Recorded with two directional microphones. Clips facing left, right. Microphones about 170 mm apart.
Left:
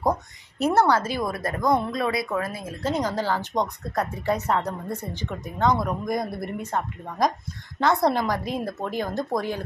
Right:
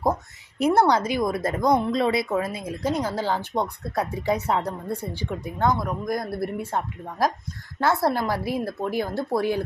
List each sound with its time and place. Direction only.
0.0 s speech: 10° right (ahead or behind)
5.7 s speech: centre (ahead or behind)